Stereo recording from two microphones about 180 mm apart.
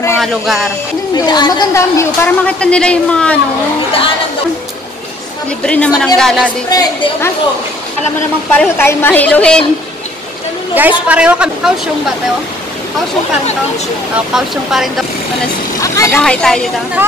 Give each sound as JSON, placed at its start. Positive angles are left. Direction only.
{"t": 0.2, "sound": "speech", "side_deg": 0}
{"t": 1.1, "sound": "a woman's voice", "side_deg": 25}
{"t": 5.7, "sound": "a woman's voice", "side_deg": 5}
{"t": 6.7, "sound": "a woman's voice", "side_deg": 20}
{"t": 8.5, "sound": "a woman's voice", "side_deg": 10}
{"t": 10.7, "sound": "a woman's voice", "side_deg": -10}
{"t": 14.1, "sound": "speech", "side_deg": 0}
{"t": 15.8, "sound": "a woman's voice", "side_deg": 15}